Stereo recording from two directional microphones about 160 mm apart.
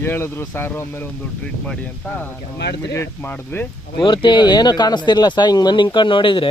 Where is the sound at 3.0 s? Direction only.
10° left (ahead or behind).